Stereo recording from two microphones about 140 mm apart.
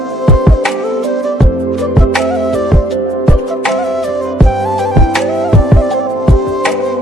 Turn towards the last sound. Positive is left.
turn(degrees=0)  # may be behind; listen again after turning